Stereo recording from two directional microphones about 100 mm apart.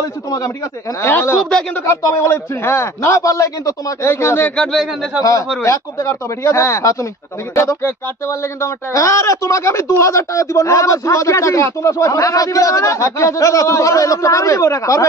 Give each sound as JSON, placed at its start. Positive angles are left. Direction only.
{"t": 0.0, "sound": "a man's voice", "side_deg": 30}
{"t": 5.6, "sound": "speech", "side_deg": 30}